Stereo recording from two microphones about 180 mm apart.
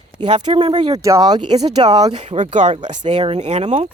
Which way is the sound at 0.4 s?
30° right (ahead or behind).